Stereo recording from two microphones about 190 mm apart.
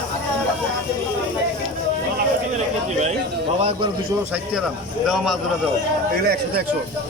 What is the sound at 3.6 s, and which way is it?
Speech, 30° right (ahead or behind).